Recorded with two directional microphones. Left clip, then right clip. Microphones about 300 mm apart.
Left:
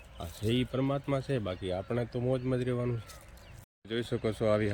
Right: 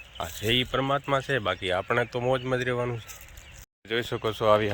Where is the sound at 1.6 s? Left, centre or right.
Centre.